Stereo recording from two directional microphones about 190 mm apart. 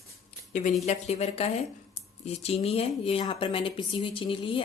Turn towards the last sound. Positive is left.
turn(degrees=25)  # may be behind; listen again after turning